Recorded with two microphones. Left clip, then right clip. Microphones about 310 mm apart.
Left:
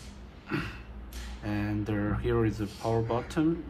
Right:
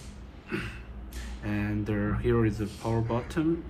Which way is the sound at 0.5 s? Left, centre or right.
Centre.